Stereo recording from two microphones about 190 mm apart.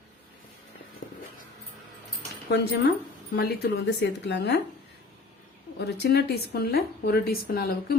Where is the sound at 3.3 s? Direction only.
55° left (ahead or behind).